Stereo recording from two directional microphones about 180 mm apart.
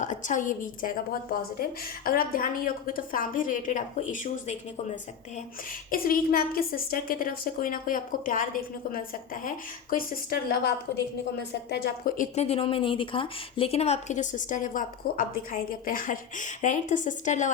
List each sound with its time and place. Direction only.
0.0 s speech: 45° left (ahead or behind)
5.9 s speech: 50° left (ahead or behind)
11.7 s speech: 50° left (ahead or behind)